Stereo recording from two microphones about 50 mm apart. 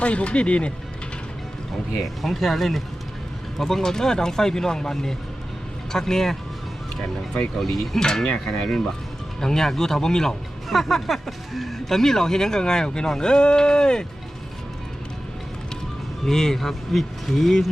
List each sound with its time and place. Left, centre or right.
0.0 s speech: left
2.2 s speech: centre
7.9 s speech: centre
16.2 s speech: centre